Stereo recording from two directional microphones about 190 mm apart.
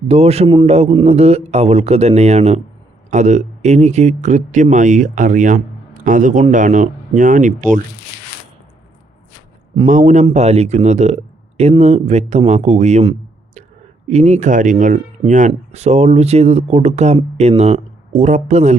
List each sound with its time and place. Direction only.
0.1 s speech: 35° right (ahead or behind)
9.7 s speech: 40° right (ahead or behind)